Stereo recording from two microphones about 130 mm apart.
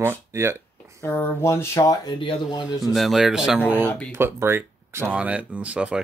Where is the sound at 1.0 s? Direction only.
20° left (ahead or behind).